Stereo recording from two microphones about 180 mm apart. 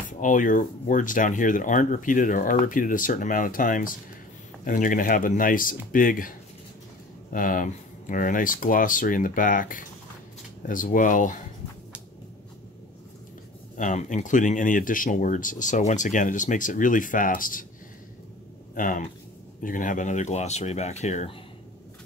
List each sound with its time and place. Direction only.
0.2 s speech: 45° left (ahead or behind)
7.3 s speech: 50° left (ahead or behind)
13.7 s speech: 45° left (ahead or behind)
18.8 s speech: 50° left (ahead or behind)